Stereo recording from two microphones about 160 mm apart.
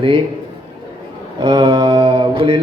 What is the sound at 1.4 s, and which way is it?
Mantra, 30° right (ahead or behind).